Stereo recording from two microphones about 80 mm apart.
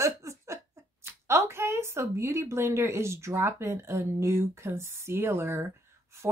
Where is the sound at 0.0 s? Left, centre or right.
Right.